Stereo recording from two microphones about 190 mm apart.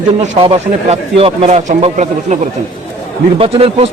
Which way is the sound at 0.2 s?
30° right (ahead or behind).